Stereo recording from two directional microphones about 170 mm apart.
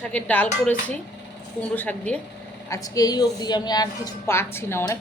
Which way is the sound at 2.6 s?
20° left (ahead or behind).